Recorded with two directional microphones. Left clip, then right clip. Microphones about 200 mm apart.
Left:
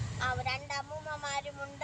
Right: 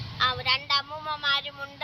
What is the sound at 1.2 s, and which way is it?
Speech, centre (ahead or behind).